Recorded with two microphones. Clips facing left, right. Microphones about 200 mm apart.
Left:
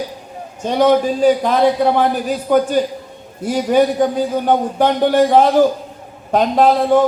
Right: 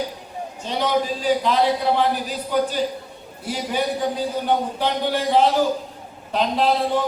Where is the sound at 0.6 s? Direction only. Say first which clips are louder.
Left 9 dB; 50° left (ahead or behind).